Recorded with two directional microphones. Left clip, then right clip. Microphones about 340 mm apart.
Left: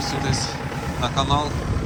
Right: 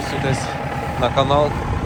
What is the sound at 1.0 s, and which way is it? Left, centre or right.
Speech, centre.